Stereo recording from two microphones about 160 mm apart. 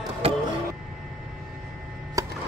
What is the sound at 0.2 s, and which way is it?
Printer, 40° right (ahead or behind).